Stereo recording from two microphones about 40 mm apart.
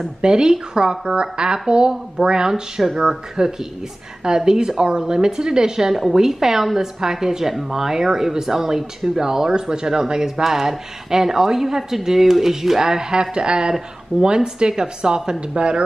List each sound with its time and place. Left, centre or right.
0.2 s a woman's voice: centre